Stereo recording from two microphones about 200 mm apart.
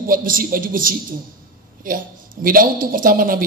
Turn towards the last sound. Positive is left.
turn(degrees=-45)  # may be behind; listen again after turning